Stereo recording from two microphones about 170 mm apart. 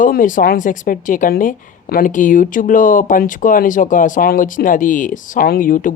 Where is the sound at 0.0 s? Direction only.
50° left (ahead or behind).